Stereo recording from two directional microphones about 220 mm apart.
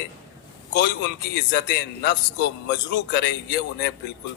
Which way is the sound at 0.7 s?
50° left (ahead or behind).